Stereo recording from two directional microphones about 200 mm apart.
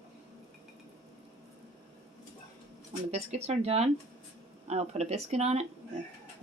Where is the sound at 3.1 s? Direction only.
35° right (ahead or behind).